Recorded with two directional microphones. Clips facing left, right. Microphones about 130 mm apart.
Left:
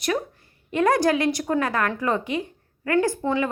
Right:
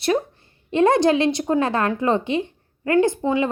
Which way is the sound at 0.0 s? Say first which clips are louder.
Right 4 dB; 25° right (ahead or behind).